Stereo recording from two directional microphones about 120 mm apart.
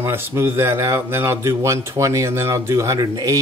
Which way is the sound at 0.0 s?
20° right (ahead or behind).